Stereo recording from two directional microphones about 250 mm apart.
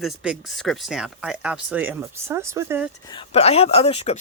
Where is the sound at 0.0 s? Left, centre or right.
Centre.